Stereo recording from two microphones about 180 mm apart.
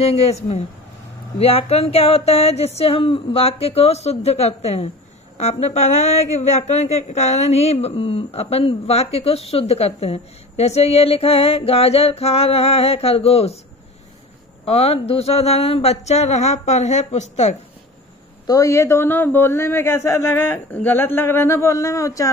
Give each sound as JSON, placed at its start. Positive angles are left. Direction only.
{"t": 0.0, "sound": "speech", "side_deg": 35}
{"t": 14.7, "sound": "speech", "side_deg": 35}
{"t": 18.5, "sound": "a man's voice", "side_deg": 15}